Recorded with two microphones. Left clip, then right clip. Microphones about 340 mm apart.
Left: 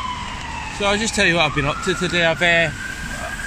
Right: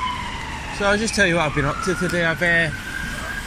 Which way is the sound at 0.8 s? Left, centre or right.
Centre.